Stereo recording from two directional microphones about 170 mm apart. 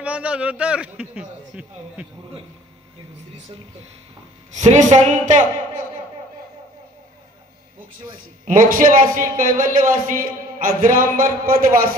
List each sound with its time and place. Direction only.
0.0 s a man's voice: 5° right (ahead or behind)
4.6 s a woman's voice: 45° right (ahead or behind)
8.5 s a man's voice: 55° right (ahead or behind)